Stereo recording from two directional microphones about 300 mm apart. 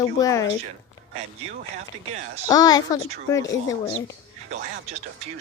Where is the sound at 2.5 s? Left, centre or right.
Centre.